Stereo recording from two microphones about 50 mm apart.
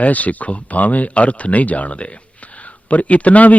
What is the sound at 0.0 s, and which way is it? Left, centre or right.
A man's voice, left.